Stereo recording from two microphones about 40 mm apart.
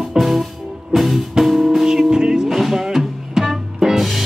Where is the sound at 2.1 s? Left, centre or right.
Centre.